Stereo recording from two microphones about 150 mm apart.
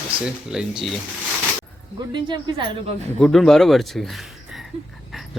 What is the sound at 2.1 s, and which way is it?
Speech, 30° right (ahead or behind).